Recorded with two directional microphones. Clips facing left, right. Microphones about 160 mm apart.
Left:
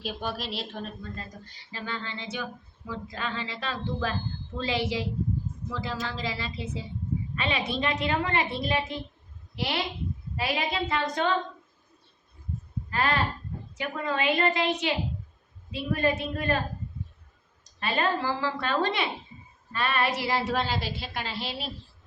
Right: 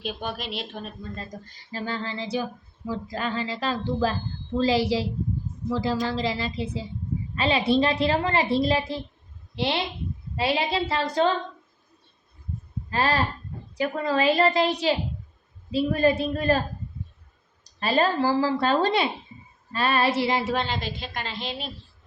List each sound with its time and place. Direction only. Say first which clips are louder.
0.0 s speech: right 1 dB; centre (ahead or behind)
1.7 s female singing: right 5 dB; 35° right (ahead or behind)
9.6 s a woman's voice: right 4 dB; 25° right (ahead or behind)
10.3 s female singing: right 5 dB; 30° right (ahead or behind)
12.9 s female singing: right 3 dB; 30° right (ahead or behind)
20.4 s a woman's voice: right 1 dB; centre (ahead or behind)